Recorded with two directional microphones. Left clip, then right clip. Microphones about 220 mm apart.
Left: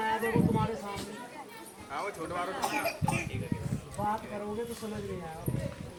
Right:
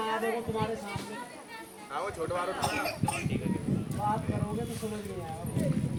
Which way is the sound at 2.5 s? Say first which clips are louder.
Even; centre (ahead or behind).